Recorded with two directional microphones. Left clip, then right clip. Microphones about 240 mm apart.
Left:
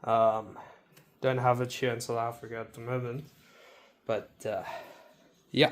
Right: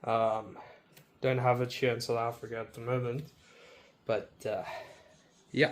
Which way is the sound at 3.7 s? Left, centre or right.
Left.